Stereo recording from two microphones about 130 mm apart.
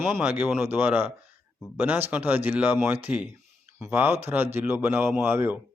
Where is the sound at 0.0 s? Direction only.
15° right (ahead or behind).